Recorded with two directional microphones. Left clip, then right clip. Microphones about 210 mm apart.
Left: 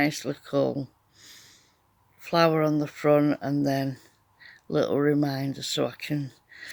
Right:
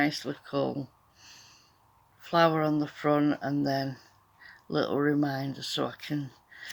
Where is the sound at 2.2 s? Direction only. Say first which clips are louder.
Left 2 dB; 40° left (ahead or behind).